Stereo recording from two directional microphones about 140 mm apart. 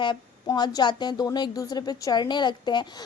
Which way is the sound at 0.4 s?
30° left (ahead or behind).